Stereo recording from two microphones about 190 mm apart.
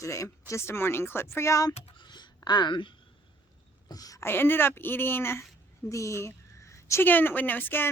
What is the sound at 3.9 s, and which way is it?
A woman's voice, 20° left (ahead or behind).